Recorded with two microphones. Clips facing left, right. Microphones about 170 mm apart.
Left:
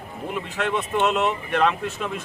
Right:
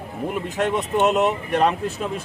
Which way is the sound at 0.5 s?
40° right (ahead or behind).